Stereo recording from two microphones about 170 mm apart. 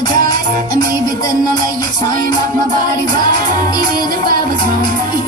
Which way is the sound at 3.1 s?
25° left (ahead or behind).